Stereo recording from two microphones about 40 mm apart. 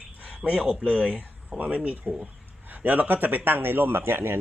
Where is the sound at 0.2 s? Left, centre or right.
Right.